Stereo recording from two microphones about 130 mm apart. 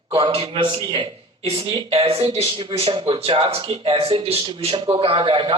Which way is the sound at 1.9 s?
50° right (ahead or behind).